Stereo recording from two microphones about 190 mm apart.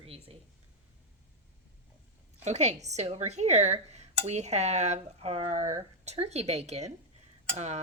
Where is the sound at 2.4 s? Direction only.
35° right (ahead or behind).